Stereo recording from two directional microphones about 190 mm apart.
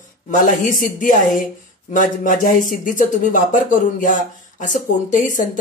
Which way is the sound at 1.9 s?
45° left (ahead or behind).